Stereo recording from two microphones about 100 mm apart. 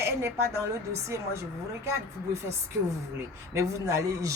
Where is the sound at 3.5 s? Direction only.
30° right (ahead or behind).